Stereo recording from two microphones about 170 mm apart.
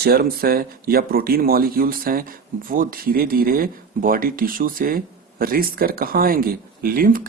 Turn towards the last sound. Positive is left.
turn(degrees=-55)  # may be behind; listen again after turning